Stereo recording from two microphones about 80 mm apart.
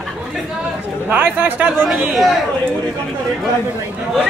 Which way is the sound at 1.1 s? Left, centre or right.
Right.